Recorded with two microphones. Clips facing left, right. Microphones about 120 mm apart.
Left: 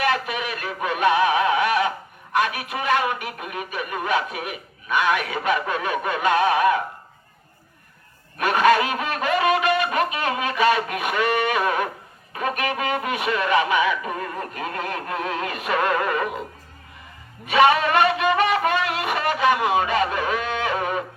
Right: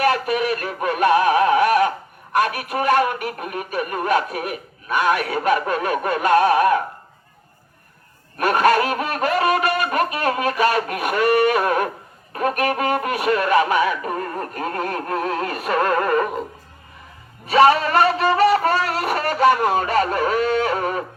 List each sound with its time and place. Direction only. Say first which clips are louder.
0.0 s synthetic singing: right 5 dB; 45° right (ahead or behind)
2.3 s speech: right 3 dB; 45° right (ahead or behind)
8.4 s speech: right 1 dB; 45° right (ahead or behind)
17.4 s music: right 3 dB; 35° right (ahead or behind)